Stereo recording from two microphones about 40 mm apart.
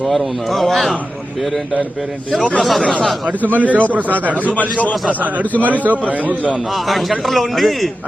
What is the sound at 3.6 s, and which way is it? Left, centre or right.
Speech, right.